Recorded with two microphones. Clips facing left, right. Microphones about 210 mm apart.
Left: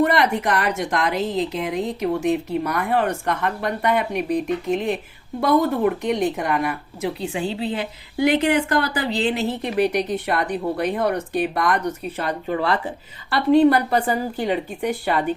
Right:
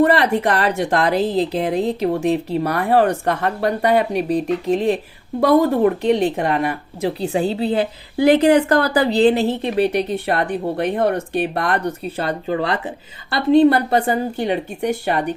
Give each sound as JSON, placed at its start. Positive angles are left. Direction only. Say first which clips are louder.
{"t": 0.0, "sound": "speech", "louder": "right 4 dB", "side_deg": -35}